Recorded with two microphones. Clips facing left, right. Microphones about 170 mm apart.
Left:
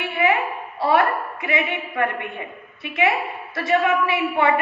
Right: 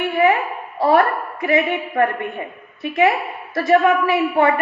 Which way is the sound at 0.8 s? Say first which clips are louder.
Right 3 dB; 40° right (ahead or behind).